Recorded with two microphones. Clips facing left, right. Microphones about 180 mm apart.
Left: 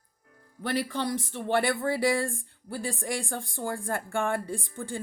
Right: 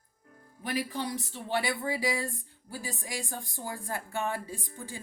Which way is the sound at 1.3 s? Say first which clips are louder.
Left 7 dB; 65° left (ahead or behind).